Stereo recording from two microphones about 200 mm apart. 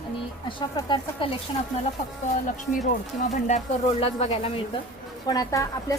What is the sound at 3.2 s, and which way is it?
A woman's voice, 35° left (ahead or behind).